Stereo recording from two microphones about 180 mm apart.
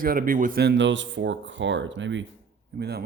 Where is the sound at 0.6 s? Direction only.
90° right.